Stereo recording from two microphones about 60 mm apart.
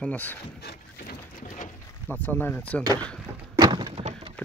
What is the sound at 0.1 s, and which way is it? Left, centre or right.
Speech, left.